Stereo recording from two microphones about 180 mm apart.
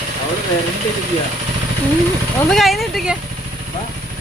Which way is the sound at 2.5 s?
Centre (ahead or behind).